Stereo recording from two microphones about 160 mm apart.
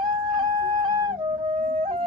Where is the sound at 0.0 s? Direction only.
25° right (ahead or behind).